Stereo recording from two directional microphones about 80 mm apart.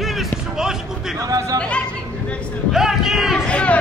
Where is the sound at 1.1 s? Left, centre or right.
Right.